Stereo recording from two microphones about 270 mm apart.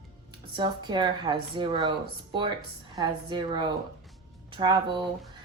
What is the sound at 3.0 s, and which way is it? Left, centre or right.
Speech, centre.